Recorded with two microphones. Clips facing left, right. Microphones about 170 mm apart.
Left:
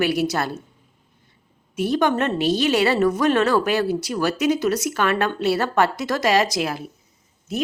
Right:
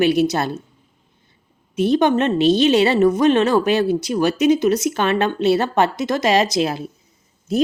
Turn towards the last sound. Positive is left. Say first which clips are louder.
# right 7 dB
turn(degrees=-35)  # may be behind; listen again after turning